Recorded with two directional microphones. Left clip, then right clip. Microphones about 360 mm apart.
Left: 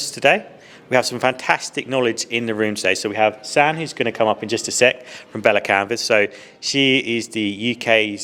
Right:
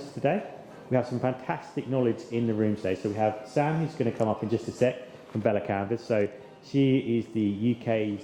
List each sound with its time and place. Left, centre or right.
0.9 s speech: centre